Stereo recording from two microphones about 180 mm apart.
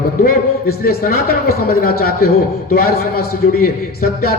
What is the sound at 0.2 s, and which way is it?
A man's voice, 55° left (ahead or behind).